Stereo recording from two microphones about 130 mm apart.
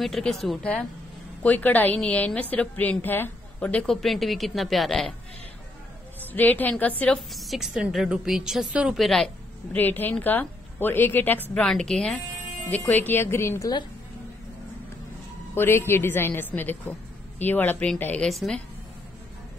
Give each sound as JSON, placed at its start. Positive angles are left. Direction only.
{"t": 0.0, "sound": "a woman's voice", "side_deg": 5}
{"t": 6.3, "sound": "a woman's voice", "side_deg": 15}
{"t": 7.3, "sound": "a woman's voice", "side_deg": 0}
{"t": 9.8, "sound": "a woman's voice", "side_deg": 15}
{"t": 11.5, "sound": "a woman's voice", "side_deg": 5}
{"t": 15.5, "sound": "a woman's voice", "side_deg": 20}